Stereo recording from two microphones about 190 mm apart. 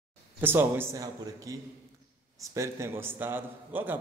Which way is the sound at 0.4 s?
10° right (ahead or behind).